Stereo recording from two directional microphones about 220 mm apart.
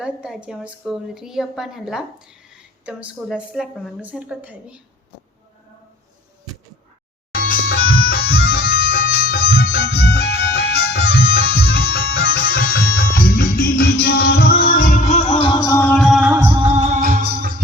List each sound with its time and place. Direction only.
0.0 s a woman's voice: 5° right (ahead or behind)
8.1 s music: 45° left (ahead or behind); by 15.7 s 25° left (ahead or behind)
15.7 s music: 5° left (ahead or behind); by 16.7 s 10° right (ahead or behind)
16.7 s music: 30° right (ahead or behind)